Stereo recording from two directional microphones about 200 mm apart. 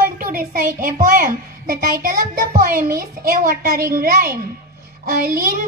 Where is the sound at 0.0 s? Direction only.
45° right (ahead or behind).